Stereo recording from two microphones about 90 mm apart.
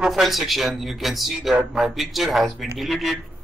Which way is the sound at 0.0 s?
Centre (ahead or behind).